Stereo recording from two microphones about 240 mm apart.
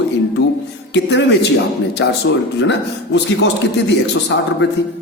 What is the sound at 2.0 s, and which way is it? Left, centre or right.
A man's voice, left.